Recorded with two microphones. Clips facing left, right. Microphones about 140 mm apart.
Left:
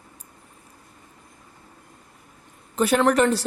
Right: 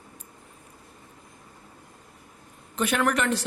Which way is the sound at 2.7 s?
35° left (ahead or behind).